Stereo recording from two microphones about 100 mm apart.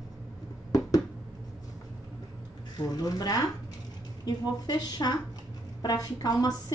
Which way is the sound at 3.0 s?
40° left (ahead or behind).